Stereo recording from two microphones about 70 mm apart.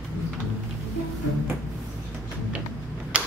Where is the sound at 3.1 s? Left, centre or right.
Centre.